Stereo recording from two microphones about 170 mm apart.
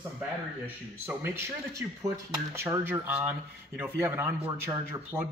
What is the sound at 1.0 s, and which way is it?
Speech, 15° right (ahead or behind).